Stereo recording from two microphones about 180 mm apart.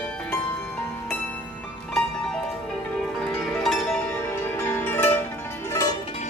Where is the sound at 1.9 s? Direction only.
5° left (ahead or behind).